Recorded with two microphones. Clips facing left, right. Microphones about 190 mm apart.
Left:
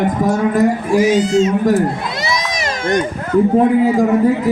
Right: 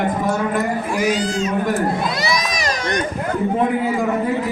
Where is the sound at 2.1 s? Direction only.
25° left (ahead or behind).